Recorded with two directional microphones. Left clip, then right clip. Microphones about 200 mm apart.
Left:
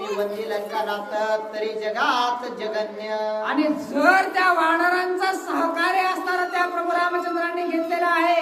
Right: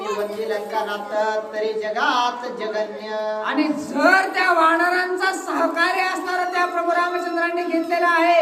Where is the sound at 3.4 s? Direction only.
10° right (ahead or behind).